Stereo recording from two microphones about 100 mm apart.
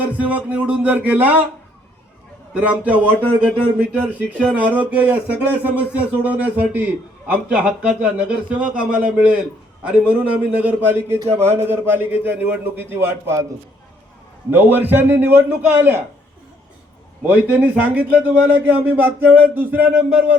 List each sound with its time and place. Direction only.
0.1 s speech: 15° right (ahead or behind)
2.5 s a man's voice: 10° right (ahead or behind); by 13.5 s 25° right (ahead or behind)
14.5 s a man's voice: 20° right (ahead or behind)
17.2 s a man's voice: 15° right (ahead or behind)